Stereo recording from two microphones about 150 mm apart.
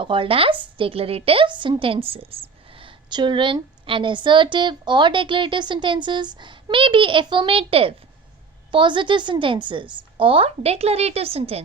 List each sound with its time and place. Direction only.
0.0 s a woman's voice: 35° right (ahead or behind)